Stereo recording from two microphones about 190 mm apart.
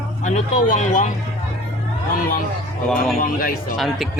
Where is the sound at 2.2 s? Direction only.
45° left (ahead or behind).